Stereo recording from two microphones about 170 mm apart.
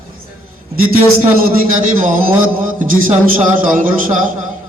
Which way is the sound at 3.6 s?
55° right (ahead or behind).